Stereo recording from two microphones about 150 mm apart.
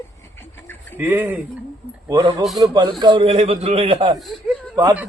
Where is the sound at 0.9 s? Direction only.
10° right (ahead or behind).